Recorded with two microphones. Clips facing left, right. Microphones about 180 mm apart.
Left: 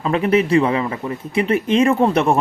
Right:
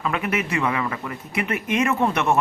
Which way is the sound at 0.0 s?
30° left (ahead or behind).